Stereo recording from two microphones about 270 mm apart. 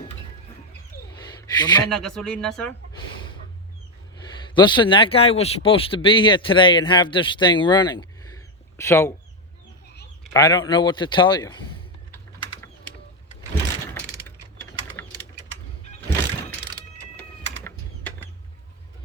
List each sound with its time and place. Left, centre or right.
1.1 s a sound: centre
1.9 s speech: centre
4.5 s speech: centre
10.3 s speech: centre